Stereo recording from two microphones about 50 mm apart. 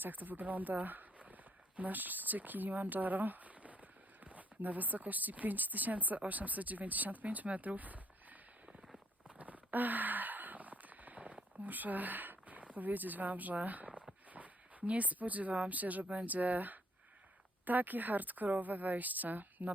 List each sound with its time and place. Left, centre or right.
0.0 s speech: right
9.2 s a sound: right
14.3 s speech: right